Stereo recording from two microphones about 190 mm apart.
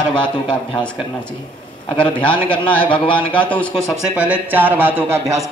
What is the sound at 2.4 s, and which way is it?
Speech, 10° left (ahead or behind).